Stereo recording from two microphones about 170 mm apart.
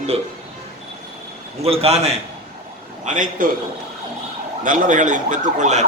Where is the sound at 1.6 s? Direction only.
35° right (ahead or behind).